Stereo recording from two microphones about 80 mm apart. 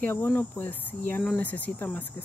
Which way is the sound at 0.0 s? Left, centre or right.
Left.